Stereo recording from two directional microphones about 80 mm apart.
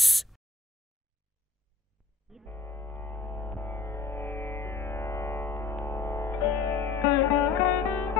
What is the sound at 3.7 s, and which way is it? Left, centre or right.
Music, left.